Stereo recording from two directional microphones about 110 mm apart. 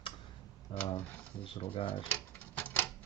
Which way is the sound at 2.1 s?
15° left (ahead or behind).